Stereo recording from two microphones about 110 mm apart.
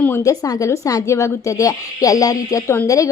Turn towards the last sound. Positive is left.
turn(degrees=30)  # may be behind; listen again after turning